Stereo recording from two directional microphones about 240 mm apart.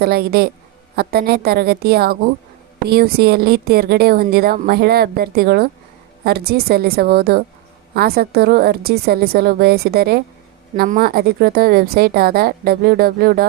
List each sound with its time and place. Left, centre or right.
0.0 s speech: right